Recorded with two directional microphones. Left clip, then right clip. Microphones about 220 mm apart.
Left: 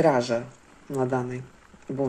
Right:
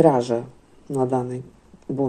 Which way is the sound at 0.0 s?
25° right (ahead or behind).